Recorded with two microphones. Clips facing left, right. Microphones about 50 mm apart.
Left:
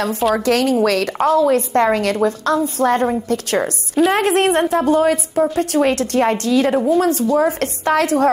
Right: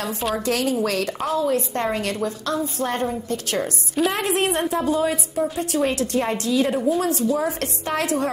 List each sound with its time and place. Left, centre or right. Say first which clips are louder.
0.5 s a woman's voice: left 5 dB; left
4.0 s a woman's voice: left 6 dB; centre
4.3 s a woman's voice: left 6 dB; left